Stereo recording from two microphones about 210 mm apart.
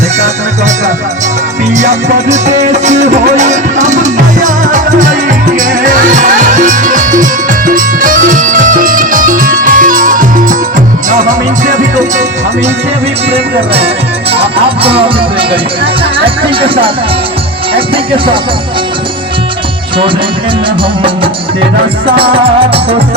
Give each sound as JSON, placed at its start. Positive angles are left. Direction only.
{"t": 1.7, "sound": "music", "side_deg": -35}
{"t": 13.3, "sound": "music", "side_deg": -30}
{"t": 22.2, "sound": "music", "side_deg": -25}